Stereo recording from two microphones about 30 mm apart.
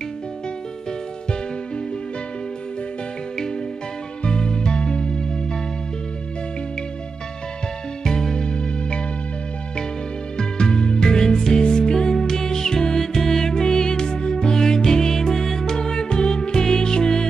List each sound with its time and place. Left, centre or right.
4.2 s music: left
8.0 s music: left
10.3 s music: left